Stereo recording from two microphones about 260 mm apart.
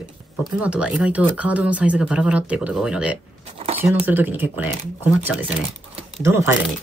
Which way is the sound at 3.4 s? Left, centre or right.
Right.